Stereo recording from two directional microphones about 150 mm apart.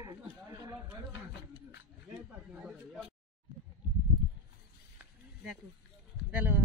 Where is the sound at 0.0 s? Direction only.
25° right (ahead or behind).